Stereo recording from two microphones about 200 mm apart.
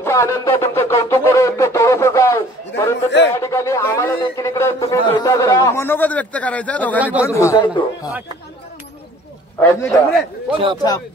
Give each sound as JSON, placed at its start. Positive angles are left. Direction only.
{"t": 0.0, "sound": "a sound", "side_deg": 15}
{"t": 0.6, "sound": "a man's voice", "side_deg": 15}
{"t": 7.0, "sound": "speech", "side_deg": -5}
{"t": 7.2, "sound": "a man's voice", "side_deg": 15}
{"t": 9.6, "sound": "a man's voice", "side_deg": 5}
{"t": 10.5, "sound": "speech", "side_deg": -25}